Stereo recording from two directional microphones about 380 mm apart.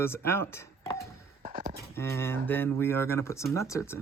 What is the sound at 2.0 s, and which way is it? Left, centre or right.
Speech, centre.